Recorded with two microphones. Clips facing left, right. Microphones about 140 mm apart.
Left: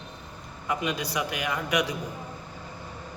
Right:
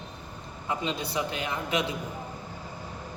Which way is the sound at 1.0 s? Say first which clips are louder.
Left 1 dB; 25° right (ahead or behind).